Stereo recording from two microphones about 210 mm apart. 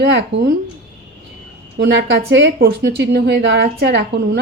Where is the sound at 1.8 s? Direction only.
55° right (ahead or behind).